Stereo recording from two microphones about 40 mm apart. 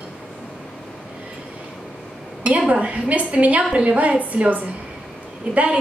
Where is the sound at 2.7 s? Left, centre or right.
Right.